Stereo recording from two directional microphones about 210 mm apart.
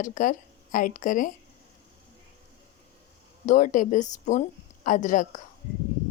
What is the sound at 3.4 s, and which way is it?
A woman's voice, 35° left (ahead or behind).